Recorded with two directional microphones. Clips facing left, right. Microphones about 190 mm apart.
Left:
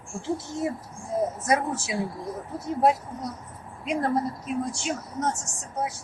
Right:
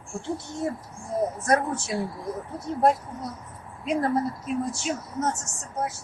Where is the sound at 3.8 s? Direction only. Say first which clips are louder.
Right 1 dB; centre (ahead or behind).